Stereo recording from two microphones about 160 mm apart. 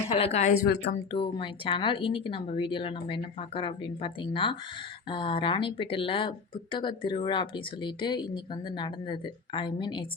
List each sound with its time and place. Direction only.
0.1 s a woman's voice: 40° left (ahead or behind)
0.7 s speech: 90° left
1.1 s speech: 35° left (ahead or behind)